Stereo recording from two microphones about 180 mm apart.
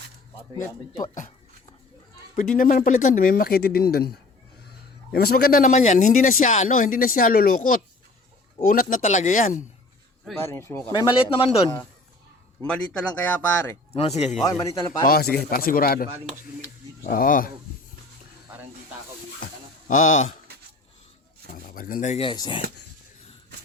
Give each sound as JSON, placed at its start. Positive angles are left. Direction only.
{"t": 0.5, "sound": "speech", "side_deg": 20}
{"t": 1.0, "sound": "speech", "side_deg": 45}
{"t": 2.6, "sound": "speech", "side_deg": 50}
{"t": 10.3, "sound": "speech", "side_deg": 15}
{"t": 10.9, "sound": "speech", "side_deg": 25}
{"t": 12.6, "sound": "speech", "side_deg": 5}
{"t": 13.9, "sound": "speech", "side_deg": 35}
{"t": 14.6, "sound": "speech", "side_deg": 20}
{"t": 15.0, "sound": "speech", "side_deg": 55}
{"t": 17.1, "sound": "speech", "side_deg": 50}
{"t": 19.9, "sound": "speech", "side_deg": 45}
{"t": 21.5, "sound": "speech", "side_deg": 50}